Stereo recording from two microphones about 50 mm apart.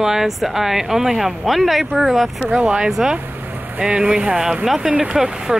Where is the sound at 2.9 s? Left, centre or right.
Centre.